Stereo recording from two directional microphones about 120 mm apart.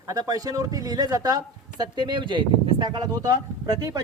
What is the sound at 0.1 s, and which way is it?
Speech, 30° right (ahead or behind).